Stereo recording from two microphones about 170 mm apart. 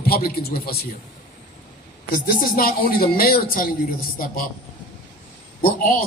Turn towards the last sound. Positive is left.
turn(degrees=60)  # may be behind; listen again after turning